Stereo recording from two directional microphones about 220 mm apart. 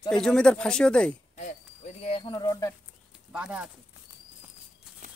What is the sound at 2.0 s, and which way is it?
Speech, 25° left (ahead or behind).